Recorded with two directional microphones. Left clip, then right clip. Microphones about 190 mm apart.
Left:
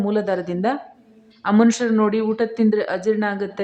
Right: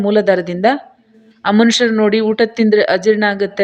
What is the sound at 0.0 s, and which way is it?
Speech, 15° right (ahead or behind).